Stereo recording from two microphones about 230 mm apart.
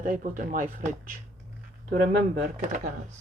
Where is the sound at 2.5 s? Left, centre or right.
Right.